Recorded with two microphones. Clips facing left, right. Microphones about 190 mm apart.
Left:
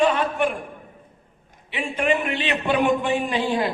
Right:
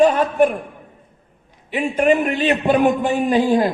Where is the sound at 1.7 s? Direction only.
40° right (ahead or behind).